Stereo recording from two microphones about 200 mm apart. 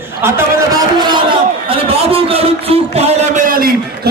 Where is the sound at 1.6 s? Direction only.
30° right (ahead or behind).